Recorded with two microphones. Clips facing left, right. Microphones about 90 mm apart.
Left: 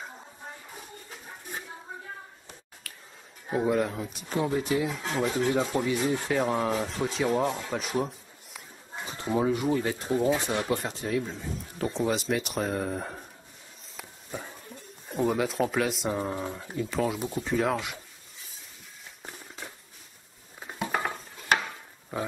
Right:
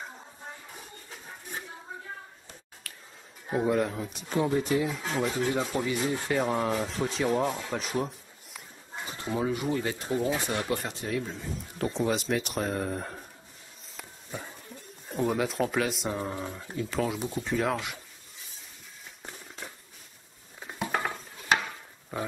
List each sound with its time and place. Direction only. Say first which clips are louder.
2.8 s finger snapping: even; centre (ahead or behind)
3.4 s speech: even; centre (ahead or behind)
8.0 s a sound: left 1 dB; centre (ahead or behind)
9.7 s speech: left 3 dB; 15° left (ahead or behind)
10.9 s speech: left 2 dB; centre (ahead or behind)
20.9 s dishes: even; 5° left (ahead or behind)